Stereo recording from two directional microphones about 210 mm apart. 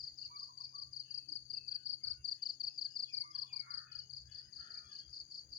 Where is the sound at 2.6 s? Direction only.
20° left (ahead or behind).